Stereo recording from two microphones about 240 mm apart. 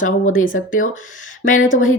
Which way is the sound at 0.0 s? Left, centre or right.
Left.